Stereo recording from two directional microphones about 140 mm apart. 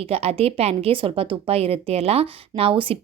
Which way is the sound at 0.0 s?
45° right (ahead or behind).